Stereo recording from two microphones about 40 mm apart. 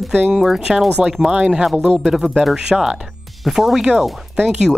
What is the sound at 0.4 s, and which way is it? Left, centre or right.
Speech, centre.